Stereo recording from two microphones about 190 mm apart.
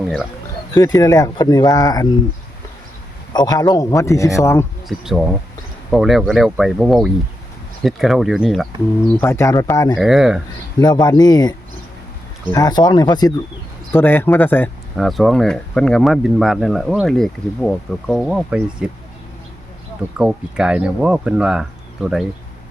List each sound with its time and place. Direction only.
0.7 s speech: 20° left (ahead or behind)
3.3 s a man's voice: 20° left (ahead or behind)
4.9 s speech: centre (ahead or behind)
9.0 s a man's voice: 15° left (ahead or behind)
10.0 s speech: centre (ahead or behind)
10.8 s a man's voice: 20° left (ahead or behind); by 18.9 s 5° right (ahead or behind)
20.1 s speech: 5° right (ahead or behind)